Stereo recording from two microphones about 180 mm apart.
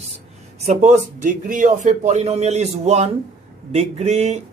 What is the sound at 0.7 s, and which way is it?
Speech, 40° right (ahead or behind).